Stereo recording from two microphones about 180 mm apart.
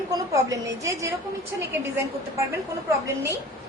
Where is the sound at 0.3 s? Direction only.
15° right (ahead or behind).